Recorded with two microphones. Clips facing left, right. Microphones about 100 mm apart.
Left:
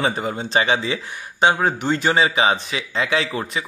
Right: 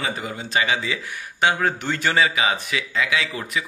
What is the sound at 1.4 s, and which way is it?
A man's voice, 20° left (ahead or behind).